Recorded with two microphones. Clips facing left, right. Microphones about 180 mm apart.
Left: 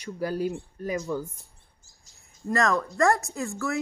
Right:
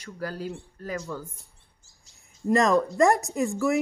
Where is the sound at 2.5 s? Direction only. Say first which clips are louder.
Right 4 dB; 20° right (ahead or behind).